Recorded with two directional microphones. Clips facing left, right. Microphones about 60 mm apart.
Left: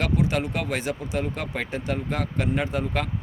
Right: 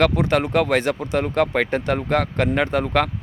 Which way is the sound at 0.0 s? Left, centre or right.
Right.